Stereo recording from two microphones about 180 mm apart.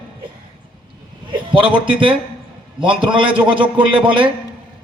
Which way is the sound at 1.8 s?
25° right (ahead or behind).